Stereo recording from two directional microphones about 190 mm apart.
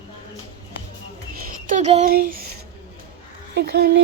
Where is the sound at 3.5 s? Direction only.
60° right (ahead or behind).